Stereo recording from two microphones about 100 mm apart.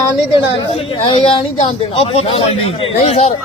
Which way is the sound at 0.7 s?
65° left (ahead or behind).